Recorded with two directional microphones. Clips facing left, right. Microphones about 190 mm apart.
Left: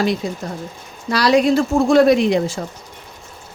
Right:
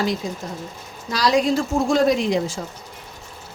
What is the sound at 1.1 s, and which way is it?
A woman's voice, 65° left (ahead or behind).